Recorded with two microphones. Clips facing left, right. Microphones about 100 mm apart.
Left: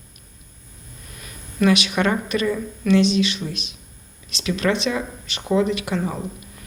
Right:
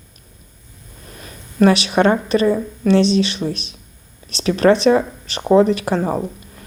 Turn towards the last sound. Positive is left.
turn(degrees=-45)  # may be behind; listen again after turning